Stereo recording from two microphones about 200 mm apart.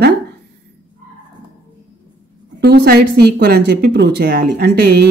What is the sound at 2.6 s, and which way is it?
Speech, 55° right (ahead or behind).